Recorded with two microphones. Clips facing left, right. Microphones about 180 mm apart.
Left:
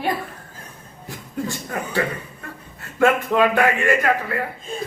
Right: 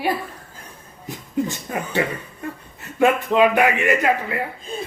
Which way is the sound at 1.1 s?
20° right (ahead or behind).